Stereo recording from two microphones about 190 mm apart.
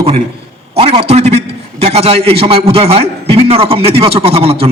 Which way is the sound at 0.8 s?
35° right (ahead or behind).